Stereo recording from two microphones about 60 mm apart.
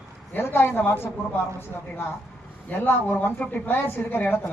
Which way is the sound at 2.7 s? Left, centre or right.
Left.